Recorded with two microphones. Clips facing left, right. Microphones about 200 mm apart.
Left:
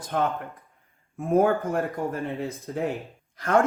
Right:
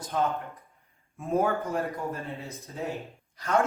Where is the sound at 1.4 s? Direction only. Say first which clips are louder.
Left 5 dB; 55° left (ahead or behind).